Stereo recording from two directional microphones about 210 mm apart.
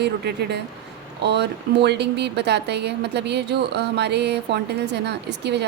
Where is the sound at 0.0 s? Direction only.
55° right (ahead or behind).